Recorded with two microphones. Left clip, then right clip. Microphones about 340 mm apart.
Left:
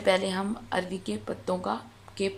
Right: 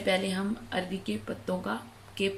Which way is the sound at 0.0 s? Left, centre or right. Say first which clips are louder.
Left 4 dB; centre.